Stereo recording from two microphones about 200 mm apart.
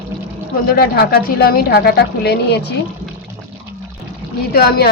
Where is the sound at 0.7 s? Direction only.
50° left (ahead or behind).